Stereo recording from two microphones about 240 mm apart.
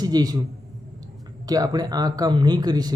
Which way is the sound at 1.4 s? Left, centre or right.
Centre.